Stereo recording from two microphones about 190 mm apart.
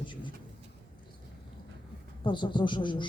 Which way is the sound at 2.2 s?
25° left (ahead or behind).